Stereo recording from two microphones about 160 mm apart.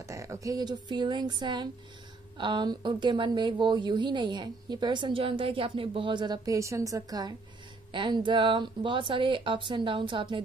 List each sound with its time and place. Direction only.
0.0 s a woman's voice: 20° right (ahead or behind)